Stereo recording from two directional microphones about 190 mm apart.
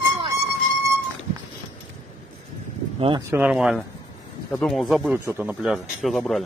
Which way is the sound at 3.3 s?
5° right (ahead or behind).